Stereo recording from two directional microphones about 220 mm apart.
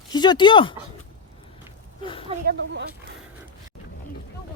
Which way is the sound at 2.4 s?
50° right (ahead or behind).